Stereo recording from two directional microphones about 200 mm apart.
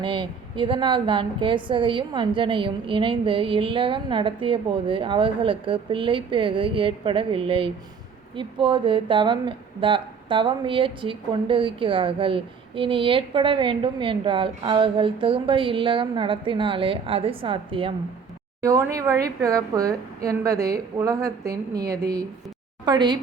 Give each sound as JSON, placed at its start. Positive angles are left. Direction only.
{"t": 0.0, "sound": "speech", "side_deg": -25}
{"t": 18.6, "sound": "a woman's voice", "side_deg": -15}